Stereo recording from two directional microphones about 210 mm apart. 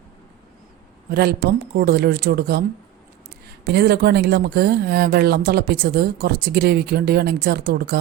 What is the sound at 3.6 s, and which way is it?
Speech, 50° right (ahead or behind).